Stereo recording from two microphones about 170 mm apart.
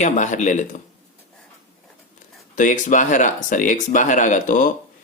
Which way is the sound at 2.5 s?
50° left (ahead or behind).